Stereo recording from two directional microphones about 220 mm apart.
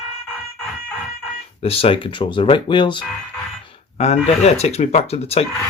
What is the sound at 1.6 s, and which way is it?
Speech, 25° left (ahead or behind).